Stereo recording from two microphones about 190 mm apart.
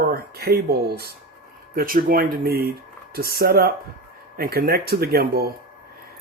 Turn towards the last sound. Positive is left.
turn(degrees=-55)  # may be behind; listen again after turning